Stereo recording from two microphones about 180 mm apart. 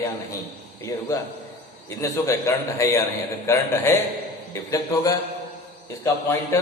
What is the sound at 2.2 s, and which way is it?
A man's voice, 15° left (ahead or behind).